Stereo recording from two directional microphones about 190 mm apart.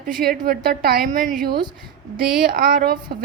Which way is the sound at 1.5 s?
25° right (ahead or behind).